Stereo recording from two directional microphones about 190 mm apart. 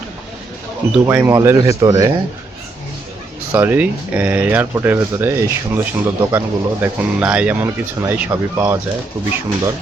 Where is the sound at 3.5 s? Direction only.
10° right (ahead or behind).